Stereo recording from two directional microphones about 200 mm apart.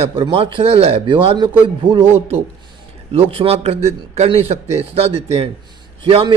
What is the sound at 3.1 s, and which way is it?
A man's voice, 30° right (ahead or behind).